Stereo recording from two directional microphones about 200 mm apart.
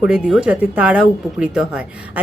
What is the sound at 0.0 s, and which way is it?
Speech, 5° right (ahead or behind).